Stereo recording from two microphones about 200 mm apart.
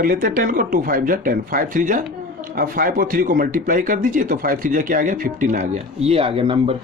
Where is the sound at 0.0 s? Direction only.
40° right (ahead or behind).